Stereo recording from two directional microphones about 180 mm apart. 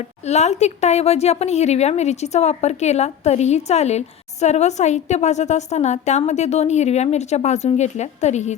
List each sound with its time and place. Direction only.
0.3 s a woman's voice: 40° left (ahead or behind)